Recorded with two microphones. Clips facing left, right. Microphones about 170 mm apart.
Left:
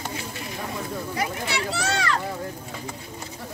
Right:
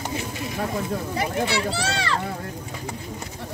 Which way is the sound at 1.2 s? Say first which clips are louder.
Right 4 dB; 30° right (ahead or behind).